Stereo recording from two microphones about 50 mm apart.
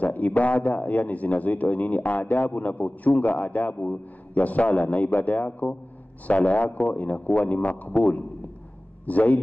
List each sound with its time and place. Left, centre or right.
0.0 s a man's voice: left